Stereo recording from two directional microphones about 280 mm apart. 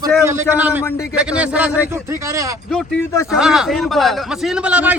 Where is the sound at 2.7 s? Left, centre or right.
Centre.